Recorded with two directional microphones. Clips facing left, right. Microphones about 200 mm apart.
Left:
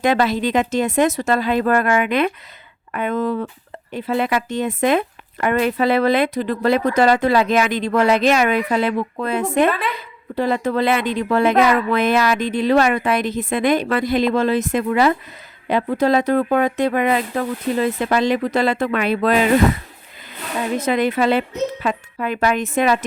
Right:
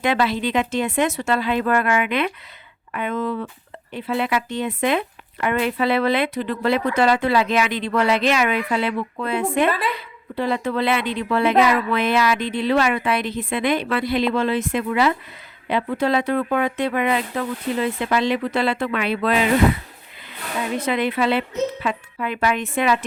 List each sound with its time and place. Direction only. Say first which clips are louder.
0.0 s speech: left 3 dB; 45° left (ahead or behind)
20.7 s speech: left 3 dB; 45° left (ahead or behind)